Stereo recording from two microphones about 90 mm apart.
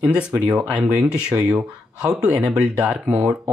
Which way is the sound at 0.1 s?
10° right (ahead or behind).